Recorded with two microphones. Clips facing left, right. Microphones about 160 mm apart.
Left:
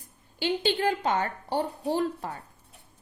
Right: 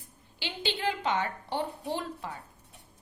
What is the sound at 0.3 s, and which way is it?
A woman's voice, 45° left (ahead or behind).